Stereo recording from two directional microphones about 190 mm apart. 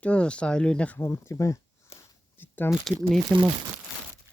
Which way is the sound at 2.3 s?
10° left (ahead or behind).